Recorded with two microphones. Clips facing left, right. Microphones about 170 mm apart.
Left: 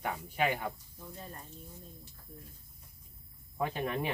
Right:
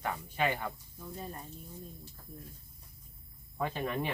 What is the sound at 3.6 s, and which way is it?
Speech, 10° left (ahead or behind).